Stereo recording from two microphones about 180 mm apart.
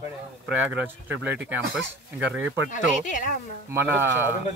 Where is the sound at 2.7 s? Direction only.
45° left (ahead or behind).